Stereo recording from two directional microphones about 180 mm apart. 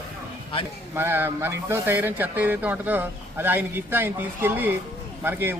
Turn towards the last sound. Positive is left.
turn(degrees=-10)  # may be behind; listen again after turning